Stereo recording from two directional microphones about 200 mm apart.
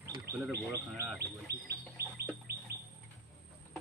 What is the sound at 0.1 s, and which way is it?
Speech, 15° right (ahead or behind).